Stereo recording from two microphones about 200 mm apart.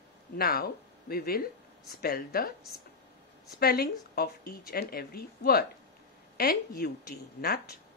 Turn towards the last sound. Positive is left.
turn(degrees=50)  # may be behind; listen again after turning